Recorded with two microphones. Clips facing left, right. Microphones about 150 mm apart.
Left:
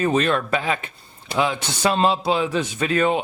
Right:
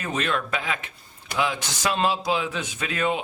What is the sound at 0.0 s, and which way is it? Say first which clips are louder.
Speech: left 7 dB; 35° left (ahead or behind).